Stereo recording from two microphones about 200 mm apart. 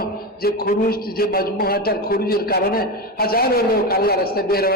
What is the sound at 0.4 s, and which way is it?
A man's voice, 50° left (ahead or behind).